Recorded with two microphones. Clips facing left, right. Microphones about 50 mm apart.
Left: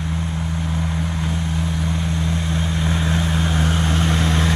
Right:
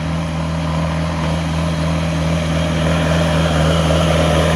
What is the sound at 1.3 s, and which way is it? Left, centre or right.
Vehicle, right.